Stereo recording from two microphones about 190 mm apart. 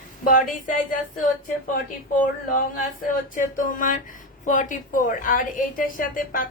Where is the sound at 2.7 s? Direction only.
45° left (ahead or behind).